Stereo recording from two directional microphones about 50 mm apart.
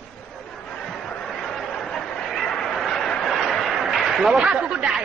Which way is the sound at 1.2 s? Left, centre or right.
Centre.